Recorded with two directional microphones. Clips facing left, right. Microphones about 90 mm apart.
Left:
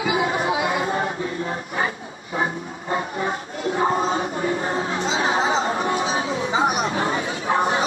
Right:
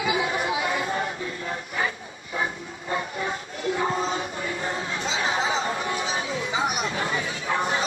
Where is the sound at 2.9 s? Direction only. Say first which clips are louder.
Left 4 dB; 35° left (ahead or behind).